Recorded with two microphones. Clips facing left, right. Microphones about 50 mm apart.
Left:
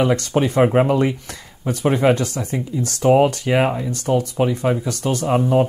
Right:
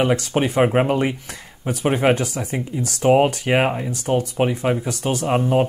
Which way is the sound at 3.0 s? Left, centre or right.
Right.